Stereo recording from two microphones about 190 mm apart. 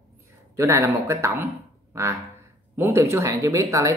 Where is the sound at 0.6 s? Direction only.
15° right (ahead or behind).